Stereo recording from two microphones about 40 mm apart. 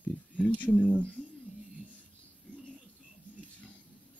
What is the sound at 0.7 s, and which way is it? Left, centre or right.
Speech, left.